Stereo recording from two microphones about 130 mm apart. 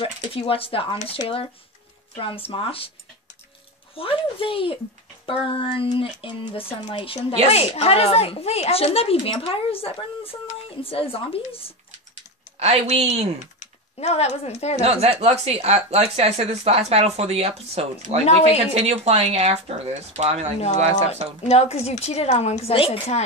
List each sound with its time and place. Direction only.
0.0 s speech: 45° left (ahead or behind)
3.9 s speech: 45° left (ahead or behind)
12.5 s speech: 50° right (ahead or behind)
13.6 s speech: 55° left (ahead or behind)
14.8 s speech: 50° right (ahead or behind)
18.2 s a woman's voice: 55° left (ahead or behind)
18.8 s speech: 50° right (ahead or behind)
21.5 s a woman's voice: 55° left (ahead or behind)